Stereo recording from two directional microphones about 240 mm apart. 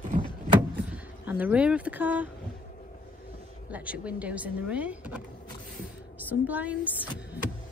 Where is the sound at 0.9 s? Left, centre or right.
Centre.